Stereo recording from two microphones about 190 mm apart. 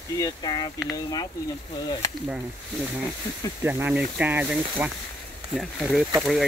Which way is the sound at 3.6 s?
10° right (ahead or behind).